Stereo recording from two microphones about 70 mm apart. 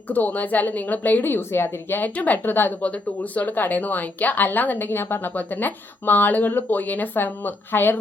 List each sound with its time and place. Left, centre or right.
0.1 s a woman's voice: left